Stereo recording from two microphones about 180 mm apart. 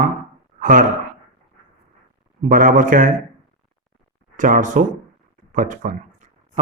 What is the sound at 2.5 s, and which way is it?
Speech, 50° right (ahead or behind).